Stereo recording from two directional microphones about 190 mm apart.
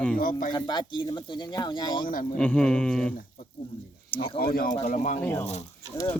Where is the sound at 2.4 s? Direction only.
5° left (ahead or behind).